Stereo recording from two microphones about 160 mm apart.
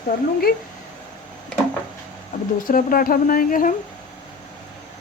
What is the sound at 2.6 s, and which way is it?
A woman's voice, 60° left (ahead or behind).